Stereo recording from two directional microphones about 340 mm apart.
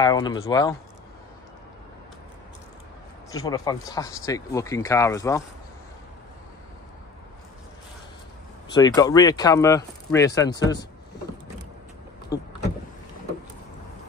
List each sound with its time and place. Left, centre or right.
0.0 s speech: centre
3.4 s speech: centre
8.7 s speech: centre
12.3 s speech: centre